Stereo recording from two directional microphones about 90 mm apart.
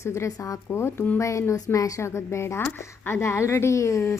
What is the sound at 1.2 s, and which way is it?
Speech, 35° left (ahead or behind).